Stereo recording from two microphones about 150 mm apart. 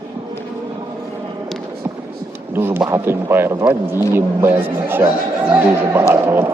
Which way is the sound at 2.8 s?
20° right (ahead or behind).